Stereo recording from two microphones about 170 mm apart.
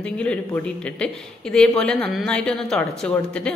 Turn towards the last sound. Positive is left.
turn(degrees=5)  # may be behind; listen again after turning